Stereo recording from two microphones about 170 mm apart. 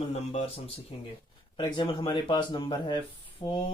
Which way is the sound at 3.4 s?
30° left (ahead or behind).